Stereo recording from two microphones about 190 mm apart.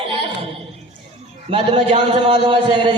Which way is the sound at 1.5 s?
30° right (ahead or behind).